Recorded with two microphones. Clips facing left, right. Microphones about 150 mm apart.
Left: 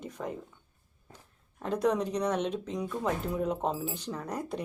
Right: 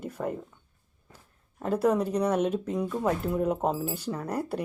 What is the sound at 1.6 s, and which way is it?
A woman's voice, 5° right (ahead or behind).